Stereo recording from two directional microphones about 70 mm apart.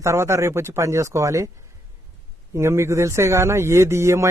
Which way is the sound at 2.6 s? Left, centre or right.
Right.